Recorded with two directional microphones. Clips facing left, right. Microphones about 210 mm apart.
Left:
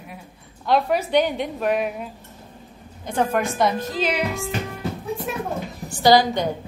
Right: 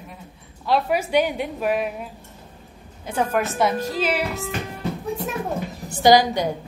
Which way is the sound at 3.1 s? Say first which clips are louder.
Left 1 dB; 5° right (ahead or behind).